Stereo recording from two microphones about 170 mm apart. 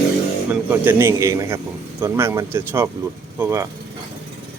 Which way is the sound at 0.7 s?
10° right (ahead or behind).